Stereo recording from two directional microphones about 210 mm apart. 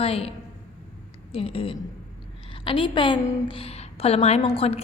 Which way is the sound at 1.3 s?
25° left (ahead or behind).